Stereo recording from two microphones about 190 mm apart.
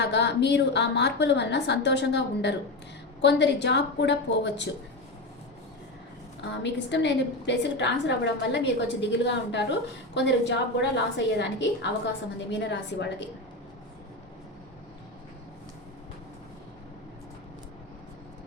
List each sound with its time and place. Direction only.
0.0 s a woman's voice: 65° left (ahead or behind)
6.5 s a woman's voice: 65° left (ahead or behind)